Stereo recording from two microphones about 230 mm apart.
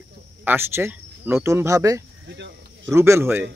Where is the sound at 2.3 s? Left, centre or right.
Right.